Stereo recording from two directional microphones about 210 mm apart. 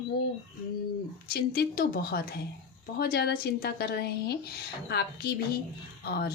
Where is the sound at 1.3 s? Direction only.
50° left (ahead or behind).